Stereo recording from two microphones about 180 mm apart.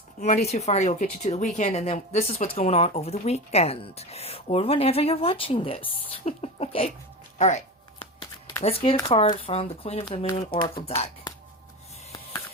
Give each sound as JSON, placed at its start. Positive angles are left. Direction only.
{"t": 0.2, "sound": "speech", "side_deg": 40}
{"t": 8.6, "sound": "speech", "side_deg": 35}
{"t": 10.4, "sound": "speech", "side_deg": 25}